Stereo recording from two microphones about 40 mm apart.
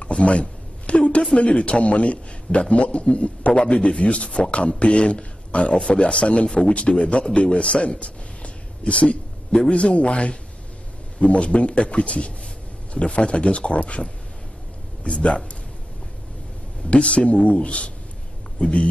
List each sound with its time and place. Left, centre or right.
0.1 s a sound: left
1.3 s a man's voice: left
16.9 s a man's voice: left